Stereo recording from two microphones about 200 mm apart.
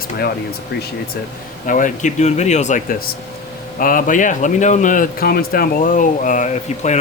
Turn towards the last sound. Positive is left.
turn(degrees=35)  # may be behind; listen again after turning